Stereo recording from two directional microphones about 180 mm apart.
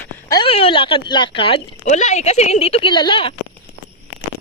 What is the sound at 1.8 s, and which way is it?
A woman's voice, 40° left (ahead or behind).